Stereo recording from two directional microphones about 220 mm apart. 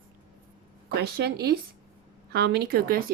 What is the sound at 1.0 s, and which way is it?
Speech, 45° right (ahead or behind).